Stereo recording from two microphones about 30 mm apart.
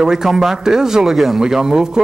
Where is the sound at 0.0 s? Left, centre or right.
Centre.